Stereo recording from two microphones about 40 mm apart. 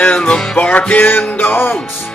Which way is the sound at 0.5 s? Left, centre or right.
Left.